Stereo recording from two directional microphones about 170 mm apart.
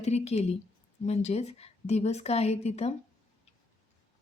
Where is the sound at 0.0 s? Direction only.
40° left (ahead or behind).